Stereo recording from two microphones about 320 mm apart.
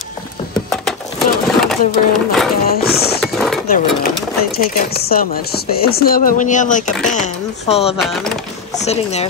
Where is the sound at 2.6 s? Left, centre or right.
Left.